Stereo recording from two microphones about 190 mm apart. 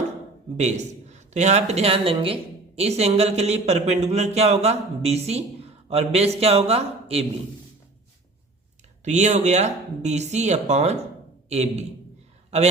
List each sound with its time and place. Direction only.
0.5 s a man's voice: 35° right (ahead or behind)
9.0 s a man's voice: 40° right (ahead or behind)